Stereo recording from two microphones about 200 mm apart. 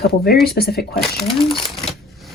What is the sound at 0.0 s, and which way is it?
Speech, 50° left (ahead or behind).